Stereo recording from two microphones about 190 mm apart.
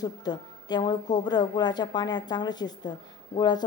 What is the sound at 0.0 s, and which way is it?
A woman's voice, 20° left (ahead or behind).